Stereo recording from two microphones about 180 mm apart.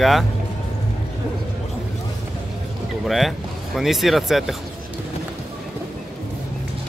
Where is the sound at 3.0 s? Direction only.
Centre (ahead or behind).